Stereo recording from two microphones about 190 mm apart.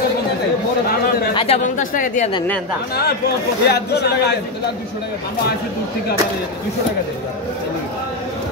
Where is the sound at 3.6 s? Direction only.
60° left (ahead or behind).